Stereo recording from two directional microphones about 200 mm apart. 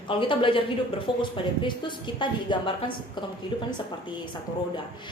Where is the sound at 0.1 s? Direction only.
25° left (ahead or behind).